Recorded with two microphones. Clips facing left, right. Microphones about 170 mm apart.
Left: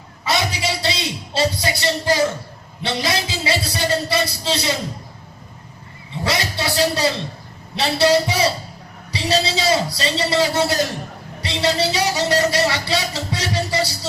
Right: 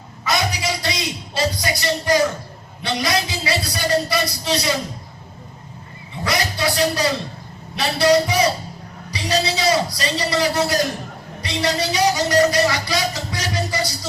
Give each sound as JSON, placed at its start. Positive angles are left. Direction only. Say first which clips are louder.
{"t": 0.3, "sound": "music", "louder": "even", "side_deg": 30}
{"t": 2.8, "sound": "speech", "louder": "right 1 dB", "side_deg": 25}
{"t": 6.2, "sound": "speech", "louder": "right 1 dB", "side_deg": 30}